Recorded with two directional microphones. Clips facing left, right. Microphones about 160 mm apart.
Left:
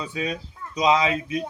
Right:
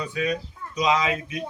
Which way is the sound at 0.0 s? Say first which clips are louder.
Right 2 dB; 30° left (ahead or behind).